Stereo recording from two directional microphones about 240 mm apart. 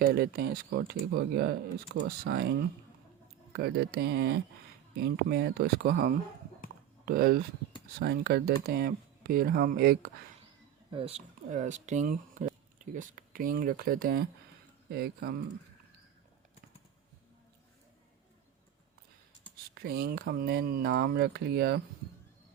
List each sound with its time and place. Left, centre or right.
0.1 s speech: right
10.9 s speech: right
19.7 s speech: right